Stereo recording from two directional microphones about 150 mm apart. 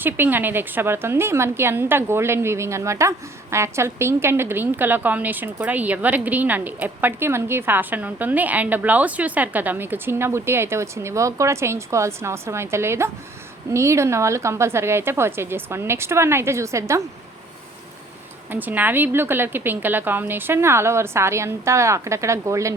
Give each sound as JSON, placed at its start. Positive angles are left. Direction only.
{"t": 0.0, "sound": "a woman's voice", "side_deg": -15}
{"t": 18.5, "sound": "a woman's voice", "side_deg": -10}